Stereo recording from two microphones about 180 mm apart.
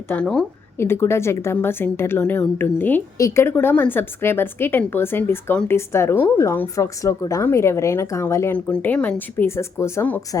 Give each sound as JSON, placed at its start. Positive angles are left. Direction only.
{"t": 0.1, "sound": "a woman's voice", "side_deg": 5}